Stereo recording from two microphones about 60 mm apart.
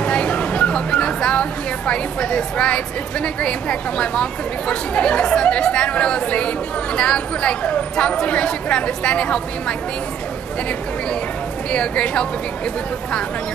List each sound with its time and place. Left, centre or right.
0.0 s a woman's voice: left
11.7 s a woman's voice: centre